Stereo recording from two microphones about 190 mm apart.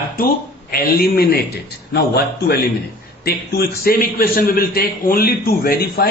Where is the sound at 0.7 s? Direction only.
55° left (ahead or behind).